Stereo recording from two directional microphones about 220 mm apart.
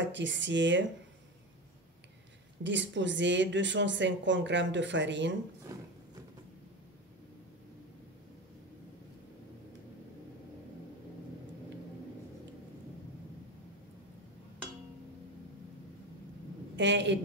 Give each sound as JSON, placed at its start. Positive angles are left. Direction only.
{"t": 0.0, "sound": "speech", "side_deg": -55}
{"t": 2.6, "sound": "speech", "side_deg": -55}
{"t": 5.7, "sound": "roaring cats", "side_deg": -15}
{"t": 16.7, "sound": "a woman's voice", "side_deg": -55}